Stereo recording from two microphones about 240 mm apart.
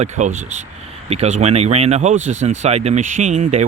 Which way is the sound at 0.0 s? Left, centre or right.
Right.